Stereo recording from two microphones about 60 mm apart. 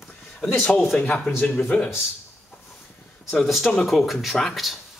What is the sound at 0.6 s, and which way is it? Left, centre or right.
Speech, centre.